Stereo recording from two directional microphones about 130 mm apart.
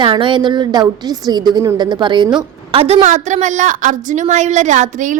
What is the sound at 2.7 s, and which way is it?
Speech, 50° right (ahead or behind).